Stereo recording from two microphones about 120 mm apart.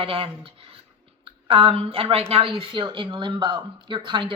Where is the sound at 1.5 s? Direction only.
50° right (ahead or behind).